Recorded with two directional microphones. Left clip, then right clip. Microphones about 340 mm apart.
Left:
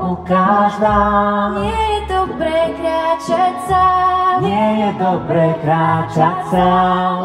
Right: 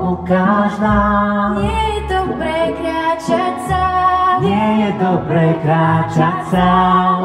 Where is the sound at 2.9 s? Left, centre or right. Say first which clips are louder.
Left 1 dB; left.